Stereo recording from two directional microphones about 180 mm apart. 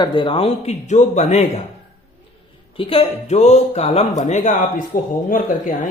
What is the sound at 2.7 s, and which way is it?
A man's voice, 30° left (ahead or behind).